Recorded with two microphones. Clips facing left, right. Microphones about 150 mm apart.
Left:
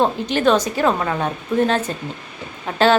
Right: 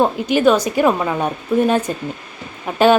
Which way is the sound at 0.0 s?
10° right (ahead or behind).